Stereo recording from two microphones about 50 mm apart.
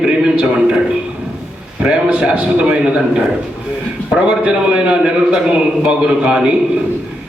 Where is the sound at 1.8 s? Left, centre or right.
Centre.